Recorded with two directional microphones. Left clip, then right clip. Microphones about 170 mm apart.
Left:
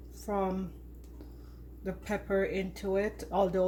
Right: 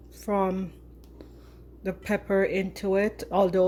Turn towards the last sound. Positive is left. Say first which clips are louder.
# right 6 dB
turn(degrees=-45)  # may be behind; listen again after turning